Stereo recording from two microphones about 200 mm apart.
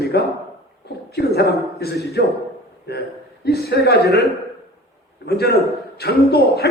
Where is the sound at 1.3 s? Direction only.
50° left (ahead or behind).